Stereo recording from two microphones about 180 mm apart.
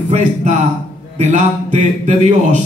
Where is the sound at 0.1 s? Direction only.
40° right (ahead or behind).